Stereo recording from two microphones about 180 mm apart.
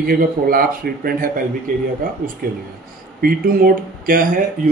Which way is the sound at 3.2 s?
55° right (ahead or behind).